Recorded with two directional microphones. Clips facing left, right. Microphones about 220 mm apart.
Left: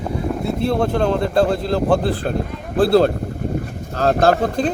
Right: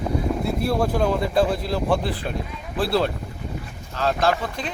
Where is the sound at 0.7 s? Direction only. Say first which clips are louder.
Left 3 dB; 5° right (ahead or behind).